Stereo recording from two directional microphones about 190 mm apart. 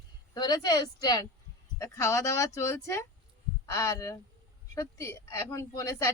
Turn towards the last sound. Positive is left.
turn(degrees=15)  # may be behind; listen again after turning